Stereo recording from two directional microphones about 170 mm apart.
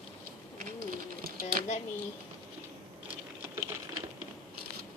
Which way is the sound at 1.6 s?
50° right (ahead or behind).